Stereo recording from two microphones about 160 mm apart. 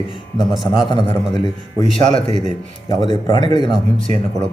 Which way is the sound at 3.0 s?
30° left (ahead or behind).